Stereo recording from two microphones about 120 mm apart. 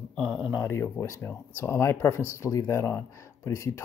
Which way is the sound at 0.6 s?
25° left (ahead or behind).